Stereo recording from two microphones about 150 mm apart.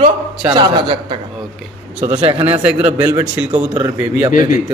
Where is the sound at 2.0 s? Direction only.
40° right (ahead or behind).